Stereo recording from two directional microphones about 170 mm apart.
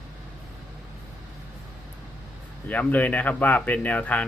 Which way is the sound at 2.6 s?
10° left (ahead or behind).